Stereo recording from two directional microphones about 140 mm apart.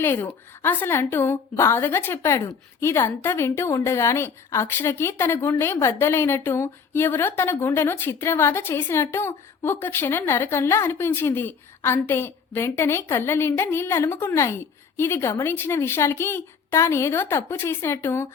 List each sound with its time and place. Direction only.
0.0 s a woman's voice: 15° left (ahead or behind)